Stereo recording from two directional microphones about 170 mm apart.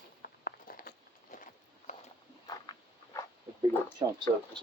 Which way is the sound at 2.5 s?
20° left (ahead or behind).